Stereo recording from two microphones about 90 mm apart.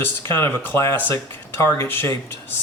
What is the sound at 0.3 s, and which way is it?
Speech, 30° left (ahead or behind).